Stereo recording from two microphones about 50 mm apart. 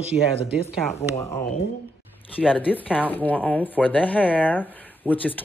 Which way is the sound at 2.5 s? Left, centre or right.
Left.